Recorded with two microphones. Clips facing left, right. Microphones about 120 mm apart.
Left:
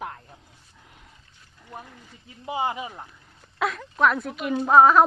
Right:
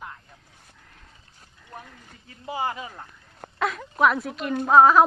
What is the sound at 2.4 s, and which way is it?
Speech, 20° left (ahead or behind).